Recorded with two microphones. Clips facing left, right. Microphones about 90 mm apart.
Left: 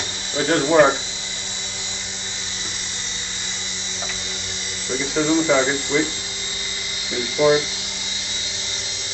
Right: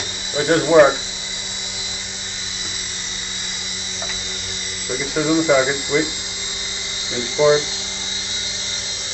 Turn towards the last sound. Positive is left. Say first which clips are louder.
# right 2 dB
turn(degrees=-25)  # may be behind; listen again after turning